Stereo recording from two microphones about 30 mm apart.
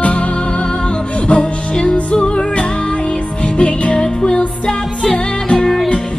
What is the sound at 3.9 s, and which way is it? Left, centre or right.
Music, left.